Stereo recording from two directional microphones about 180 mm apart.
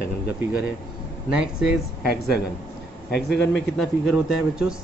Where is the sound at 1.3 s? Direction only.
5° right (ahead or behind).